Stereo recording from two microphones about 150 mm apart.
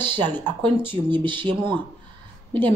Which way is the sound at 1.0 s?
30° right (ahead or behind).